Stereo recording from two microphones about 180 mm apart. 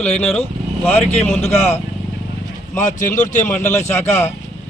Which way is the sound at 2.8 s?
45° left (ahead or behind).